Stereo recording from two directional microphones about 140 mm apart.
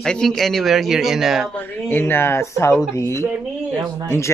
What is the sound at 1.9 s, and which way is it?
Speech, 15° left (ahead or behind).